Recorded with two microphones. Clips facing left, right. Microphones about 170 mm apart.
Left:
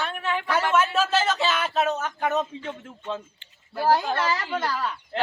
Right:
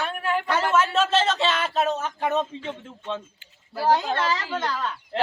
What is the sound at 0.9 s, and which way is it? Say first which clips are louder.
Speech: right 1 dB; 25° right (ahead or behind).